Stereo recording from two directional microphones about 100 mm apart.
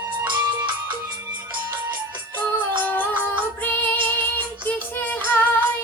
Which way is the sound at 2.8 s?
15° left (ahead or behind).